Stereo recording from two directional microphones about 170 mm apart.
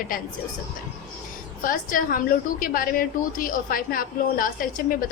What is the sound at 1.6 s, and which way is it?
A woman's voice, 55° left (ahead or behind).